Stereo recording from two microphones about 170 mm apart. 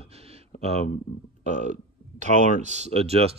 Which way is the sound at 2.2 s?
45° right (ahead or behind).